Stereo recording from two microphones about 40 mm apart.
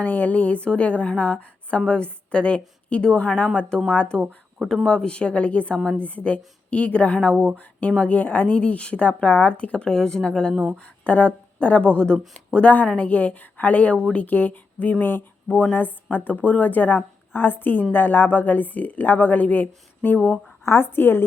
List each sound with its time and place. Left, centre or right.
0.0 s a woman's voice: left
4.7 s a woman's voice: centre
7.5 s a woman's voice: left
20.1 s speech: left
20.7 s speech: left